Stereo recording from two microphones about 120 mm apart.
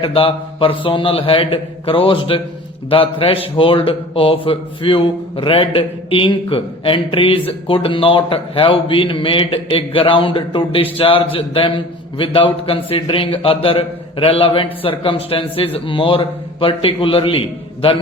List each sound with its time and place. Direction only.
0.0 s a man's voice: 50° left (ahead or behind)